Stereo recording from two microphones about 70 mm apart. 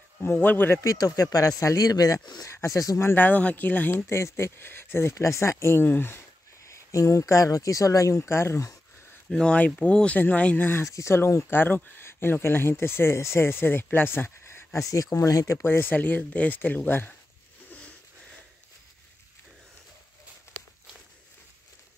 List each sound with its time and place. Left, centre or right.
0.2 s speech: left
0.7 s speech: left
3.2 s speech: left
4.1 s speech: left
6.6 s speech: left
9.3 s speech: centre; by 10.9 s left
10.9 s speech: left
11.5 s speech: left
14.9 s speech: left
17.6 s a sound: centre